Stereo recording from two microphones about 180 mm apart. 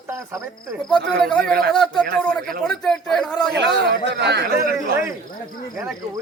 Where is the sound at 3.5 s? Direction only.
70° right (ahead or behind).